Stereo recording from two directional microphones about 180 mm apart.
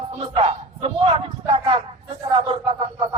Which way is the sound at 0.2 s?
30° right (ahead or behind).